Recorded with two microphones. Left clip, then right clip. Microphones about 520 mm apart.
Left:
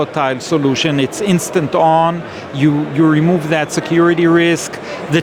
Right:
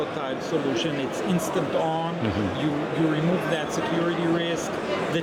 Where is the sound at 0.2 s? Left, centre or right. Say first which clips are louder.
Left 12 dB; left.